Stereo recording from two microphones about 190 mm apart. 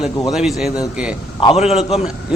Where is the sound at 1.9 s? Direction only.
5° right (ahead or behind).